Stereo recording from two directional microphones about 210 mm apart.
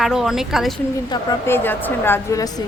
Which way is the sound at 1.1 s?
15° left (ahead or behind).